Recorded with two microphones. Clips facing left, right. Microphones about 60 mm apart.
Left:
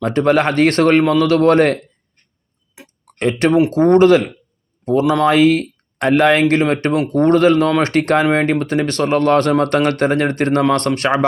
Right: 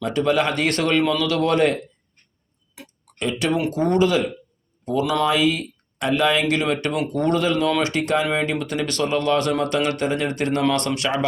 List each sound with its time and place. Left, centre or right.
0.0 s a man's voice: left
2.8 s tick-tock: left
3.2 s a man's voice: left
6.5 s a man's voice: left
8.6 s speech: left